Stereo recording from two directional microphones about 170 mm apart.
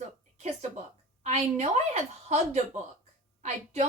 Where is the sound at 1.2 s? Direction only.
40° right (ahead or behind).